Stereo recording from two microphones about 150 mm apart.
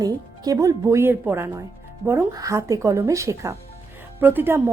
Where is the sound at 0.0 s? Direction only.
25° right (ahead or behind).